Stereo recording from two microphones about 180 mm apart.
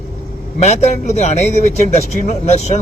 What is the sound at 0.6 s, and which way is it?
Speech, 40° left (ahead or behind).